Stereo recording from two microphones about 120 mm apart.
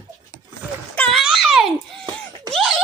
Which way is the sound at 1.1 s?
5° right (ahead or behind).